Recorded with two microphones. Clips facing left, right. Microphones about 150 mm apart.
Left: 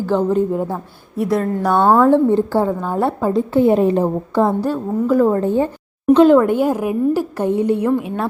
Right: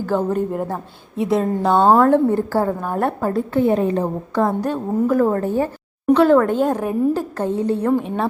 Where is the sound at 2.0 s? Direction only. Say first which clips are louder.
Left 2 dB; 20° left (ahead or behind).